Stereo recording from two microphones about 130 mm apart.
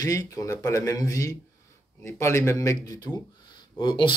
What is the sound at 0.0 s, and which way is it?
Speech, 25° left (ahead or behind).